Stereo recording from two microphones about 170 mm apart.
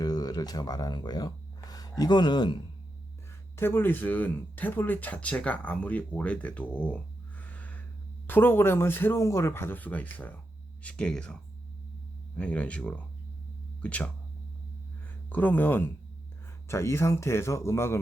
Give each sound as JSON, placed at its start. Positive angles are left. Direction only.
{"t": 0.0, "sound": "speech", "side_deg": 20}
{"t": 3.5, "sound": "speech", "side_deg": 15}
{"t": 12.4, "sound": "speech", "side_deg": 10}
{"t": 15.3, "sound": "speech", "side_deg": 10}